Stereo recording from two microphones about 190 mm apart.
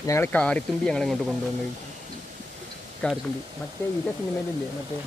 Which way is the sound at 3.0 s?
5° left (ahead or behind).